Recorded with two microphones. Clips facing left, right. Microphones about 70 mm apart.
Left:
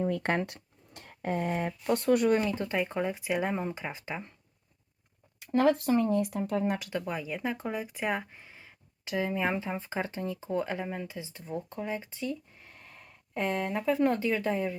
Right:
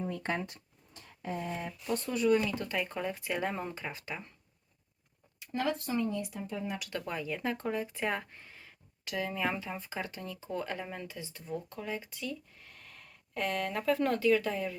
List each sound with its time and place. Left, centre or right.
0.0 s speech: left
2.4 s speech: left
5.4 s speech: left
6.9 s speech: centre
11.2 s speech: left